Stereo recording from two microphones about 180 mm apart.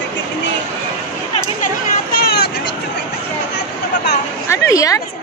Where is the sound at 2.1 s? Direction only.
60° left (ahead or behind).